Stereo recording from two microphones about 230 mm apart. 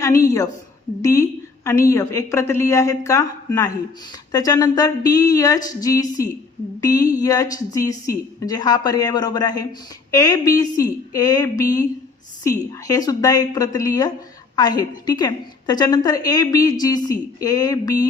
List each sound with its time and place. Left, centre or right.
0.0 s a woman's voice: centre